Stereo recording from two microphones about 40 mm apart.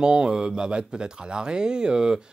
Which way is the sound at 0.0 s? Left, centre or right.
Right.